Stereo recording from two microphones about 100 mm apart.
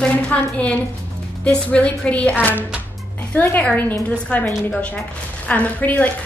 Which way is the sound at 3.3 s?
15° left (ahead or behind).